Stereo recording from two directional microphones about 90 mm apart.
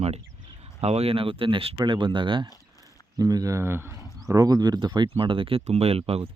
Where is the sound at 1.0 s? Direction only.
85° right; by 2.5 s 65° right (ahead or behind).